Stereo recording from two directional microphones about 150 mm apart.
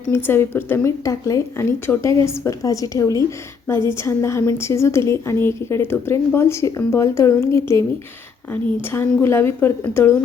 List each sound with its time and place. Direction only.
0.1 s a woman's voice: 15° left (ahead or behind)
8.9 s a woman's voice: 15° left (ahead or behind)